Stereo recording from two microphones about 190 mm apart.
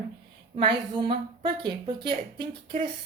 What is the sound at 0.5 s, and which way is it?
A woman's voice, 25° right (ahead or behind).